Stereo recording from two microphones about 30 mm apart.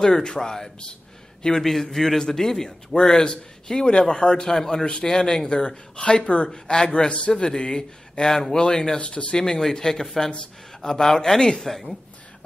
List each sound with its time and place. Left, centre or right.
0.0 s a man's voice: left
1.6 s a man's voice: centre; by 4.5 s left
4.5 s speech: centre
4.8 s a man's voice: left
6.5 s a man's voice: left
7.1 s a man's voice: left
9.0 s speech: left
9.4 s a man's voice: centre
11.7 s a woman's voice: centre